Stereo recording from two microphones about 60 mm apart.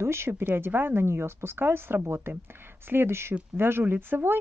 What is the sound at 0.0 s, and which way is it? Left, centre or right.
Speech, right.